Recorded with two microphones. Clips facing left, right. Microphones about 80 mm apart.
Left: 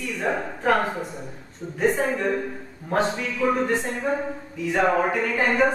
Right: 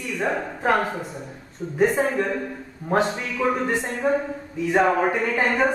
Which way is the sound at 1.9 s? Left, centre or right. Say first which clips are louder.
Even; centre.